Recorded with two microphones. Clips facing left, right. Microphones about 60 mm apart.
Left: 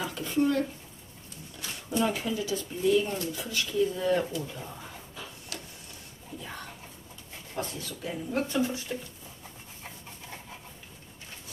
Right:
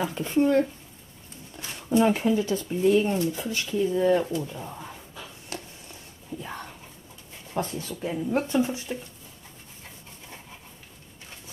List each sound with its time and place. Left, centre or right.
0.0 s speech: right
5.5 s a sound: right
7.5 s speech: right